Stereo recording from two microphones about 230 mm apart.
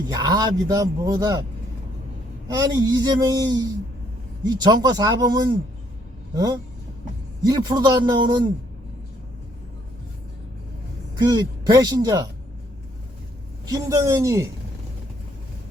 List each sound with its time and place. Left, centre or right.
0.1 s speech: centre
2.5 s speech: centre
11.3 s speech: centre
13.7 s speech: centre